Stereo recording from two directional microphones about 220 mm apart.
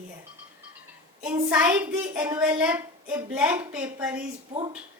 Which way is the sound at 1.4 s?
10° right (ahead or behind).